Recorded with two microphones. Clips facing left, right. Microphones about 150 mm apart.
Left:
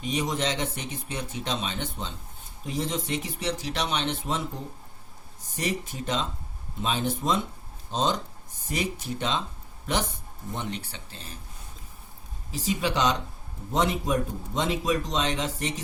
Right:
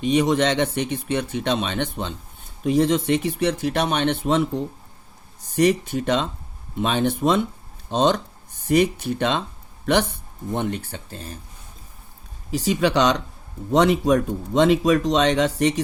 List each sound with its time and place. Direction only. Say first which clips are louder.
0.0 s speech: right 9 dB; 75° right (ahead or behind)
5.5 s speech: right 12 dB; 70° right (ahead or behind)
10.5 s speech: right 9 dB; 55° right (ahead or behind)
12.5 s speech: right 7 dB; 70° right (ahead or behind)